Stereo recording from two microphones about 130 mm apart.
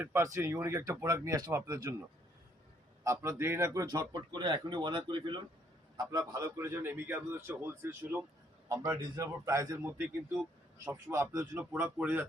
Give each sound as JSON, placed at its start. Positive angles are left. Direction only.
{"t": 0.0, "sound": "a man's voice", "side_deg": -20}
{"t": 3.0, "sound": "a man's voice", "side_deg": -20}
{"t": 9.0, "sound": "a man's voice", "side_deg": -30}
{"t": 11.1, "sound": "a man's voice", "side_deg": -25}